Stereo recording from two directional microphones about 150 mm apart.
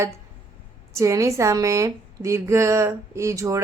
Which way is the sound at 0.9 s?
20° right (ahead or behind).